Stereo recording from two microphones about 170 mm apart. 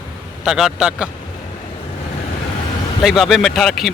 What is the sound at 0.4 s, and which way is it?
Speech, 5° right (ahead or behind).